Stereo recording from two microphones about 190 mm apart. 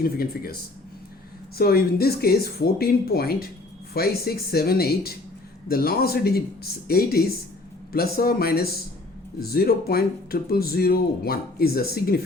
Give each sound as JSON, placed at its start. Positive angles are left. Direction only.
{"t": 0.0, "sound": "speech", "side_deg": 50}
{"t": 1.5, "sound": "speech", "side_deg": 55}